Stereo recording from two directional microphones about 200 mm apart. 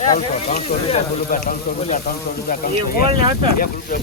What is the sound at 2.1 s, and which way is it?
Speech, 50° left (ahead or behind).